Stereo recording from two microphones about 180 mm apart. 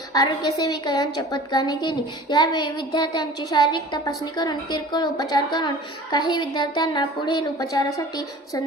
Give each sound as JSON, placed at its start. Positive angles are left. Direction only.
{"t": 0.1, "sound": "a woman's voice", "side_deg": 20}